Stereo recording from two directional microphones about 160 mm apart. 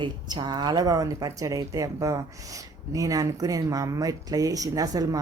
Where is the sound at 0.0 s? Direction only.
30° right (ahead or behind).